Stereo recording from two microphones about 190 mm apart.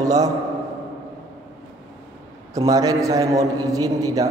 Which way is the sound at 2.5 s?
20° right (ahead or behind).